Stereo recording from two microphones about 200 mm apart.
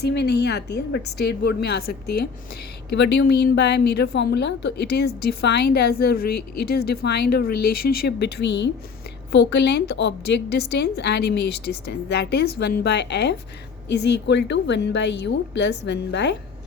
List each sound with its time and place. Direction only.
0.0 s a woman's voice: 55° left (ahead or behind)